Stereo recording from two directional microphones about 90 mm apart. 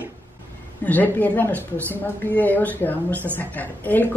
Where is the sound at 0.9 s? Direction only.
20° left (ahead or behind).